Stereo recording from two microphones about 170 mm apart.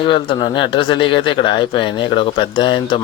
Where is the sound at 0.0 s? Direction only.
30° left (ahead or behind).